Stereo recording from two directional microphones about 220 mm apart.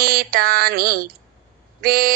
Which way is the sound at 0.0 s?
40° right (ahead or behind).